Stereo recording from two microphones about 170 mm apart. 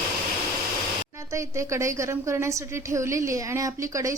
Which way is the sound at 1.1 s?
15° right (ahead or behind).